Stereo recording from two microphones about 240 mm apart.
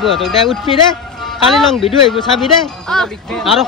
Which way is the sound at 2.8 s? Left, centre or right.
Centre.